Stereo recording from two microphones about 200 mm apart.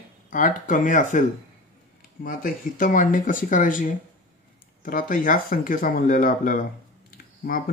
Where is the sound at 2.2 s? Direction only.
40° left (ahead or behind).